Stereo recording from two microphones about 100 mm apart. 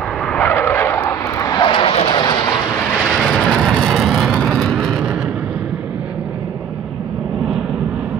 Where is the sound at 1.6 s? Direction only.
60° left (ahead or behind).